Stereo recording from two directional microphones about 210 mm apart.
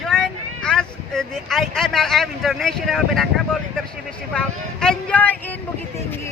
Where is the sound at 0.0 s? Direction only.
5° left (ahead or behind).